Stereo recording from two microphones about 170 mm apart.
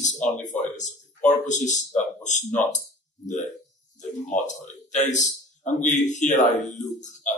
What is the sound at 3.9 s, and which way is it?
Speech, 45° left (ahead or behind).